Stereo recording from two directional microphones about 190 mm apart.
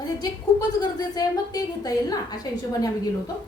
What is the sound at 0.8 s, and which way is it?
A woman's voice, 20° left (ahead or behind).